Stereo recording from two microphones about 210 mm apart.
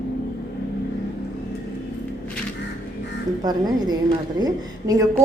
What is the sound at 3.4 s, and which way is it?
A woman's voice, 20° right (ahead or behind).